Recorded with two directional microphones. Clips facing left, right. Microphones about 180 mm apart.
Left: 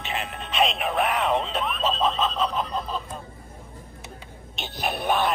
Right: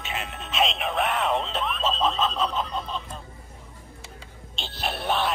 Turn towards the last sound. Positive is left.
turn(degrees=15)  # may be behind; listen again after turning